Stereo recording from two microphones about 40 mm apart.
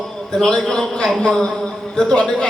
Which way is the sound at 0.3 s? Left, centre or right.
Centre.